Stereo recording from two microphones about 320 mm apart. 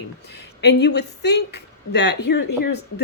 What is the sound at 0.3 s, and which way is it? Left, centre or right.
Speech, left.